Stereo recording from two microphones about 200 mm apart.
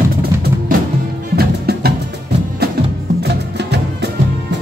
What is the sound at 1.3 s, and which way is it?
Music, 50° right (ahead or behind).